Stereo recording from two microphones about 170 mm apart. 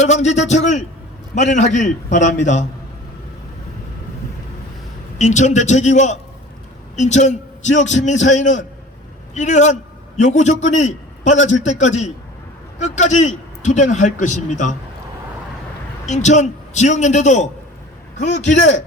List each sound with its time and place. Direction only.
0.0 s a man's voice: 40° left (ahead or behind)
5.1 s a man's voice: 45° left (ahead or behind)
16.0 s a man's voice: 45° left (ahead or behind)